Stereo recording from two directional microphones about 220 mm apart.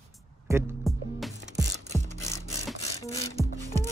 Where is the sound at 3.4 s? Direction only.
10° left (ahead or behind).